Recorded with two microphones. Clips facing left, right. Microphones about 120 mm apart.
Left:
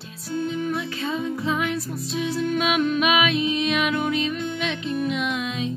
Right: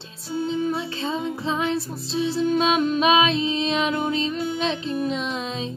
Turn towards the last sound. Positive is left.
turn(degrees=-30)  # may be behind; listen again after turning